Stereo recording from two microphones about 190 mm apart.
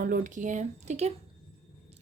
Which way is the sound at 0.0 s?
45° right (ahead or behind).